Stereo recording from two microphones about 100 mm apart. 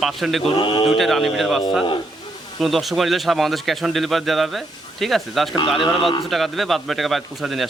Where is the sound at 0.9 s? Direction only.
Centre (ahead or behind).